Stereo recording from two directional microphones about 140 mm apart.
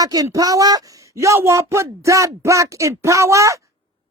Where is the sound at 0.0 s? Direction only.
25° right (ahead or behind).